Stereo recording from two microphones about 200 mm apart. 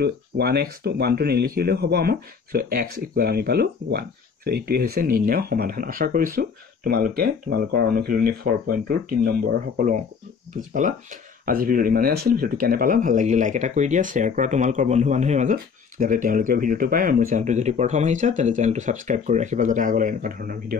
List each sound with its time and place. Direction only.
0.0 s speech: 50° right (ahead or behind)